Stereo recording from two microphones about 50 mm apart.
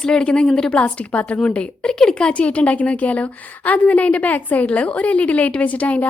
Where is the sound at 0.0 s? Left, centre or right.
Centre.